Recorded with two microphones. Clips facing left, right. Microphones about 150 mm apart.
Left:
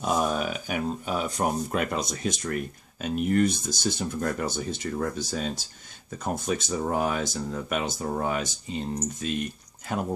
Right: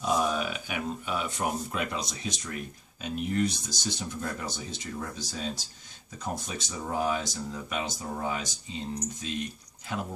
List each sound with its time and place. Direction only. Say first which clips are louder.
0.0 s speech: left 2 dB; 50° left (ahead or behind)